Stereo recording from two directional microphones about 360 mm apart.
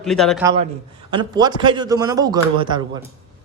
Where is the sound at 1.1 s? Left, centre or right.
Centre.